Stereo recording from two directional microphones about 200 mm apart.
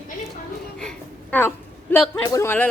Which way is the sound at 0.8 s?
5° left (ahead or behind).